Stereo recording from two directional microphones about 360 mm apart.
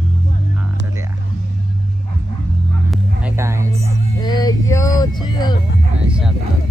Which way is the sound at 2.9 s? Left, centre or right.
Centre.